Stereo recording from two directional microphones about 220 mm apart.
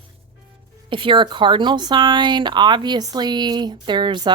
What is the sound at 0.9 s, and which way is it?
Speech, 25° right (ahead or behind).